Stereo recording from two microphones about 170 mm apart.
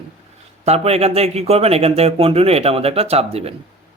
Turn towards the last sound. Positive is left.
turn(degrees=-35)  # may be behind; listen again after turning